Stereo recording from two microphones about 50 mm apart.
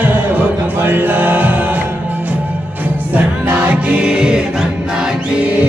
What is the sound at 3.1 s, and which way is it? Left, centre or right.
Music, right.